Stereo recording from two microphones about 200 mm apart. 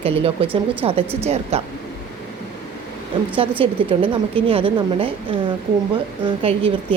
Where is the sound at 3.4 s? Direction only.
25° right (ahead or behind).